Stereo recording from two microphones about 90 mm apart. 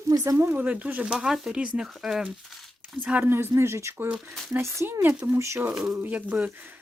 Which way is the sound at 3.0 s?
20° right (ahead or behind).